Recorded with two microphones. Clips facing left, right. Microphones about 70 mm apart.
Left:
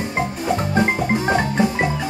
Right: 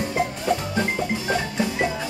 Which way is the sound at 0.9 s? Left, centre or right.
Left.